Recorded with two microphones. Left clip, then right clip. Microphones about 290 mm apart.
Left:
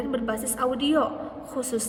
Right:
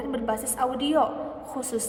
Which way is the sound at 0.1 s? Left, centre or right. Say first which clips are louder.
Even; centre.